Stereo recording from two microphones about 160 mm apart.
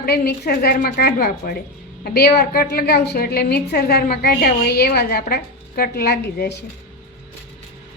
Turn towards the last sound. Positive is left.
turn(degrees=80)